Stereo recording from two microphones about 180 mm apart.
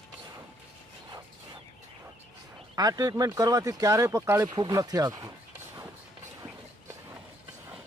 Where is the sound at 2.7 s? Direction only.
20° right (ahead or behind).